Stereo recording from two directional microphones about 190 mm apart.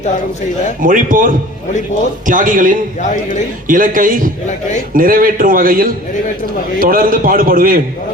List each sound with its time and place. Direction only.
0.8 s a man's voice: 45° right (ahead or behind)